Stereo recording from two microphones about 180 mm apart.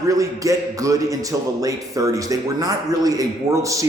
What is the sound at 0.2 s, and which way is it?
A man's voice, 20° right (ahead or behind).